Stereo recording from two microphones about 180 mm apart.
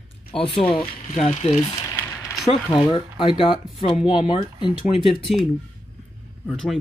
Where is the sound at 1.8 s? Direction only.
15° left (ahead or behind).